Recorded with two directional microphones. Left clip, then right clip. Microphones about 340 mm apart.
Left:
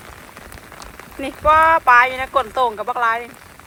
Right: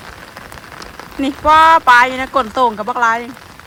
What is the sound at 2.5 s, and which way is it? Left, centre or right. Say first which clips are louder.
Speech: right 4 dB; right.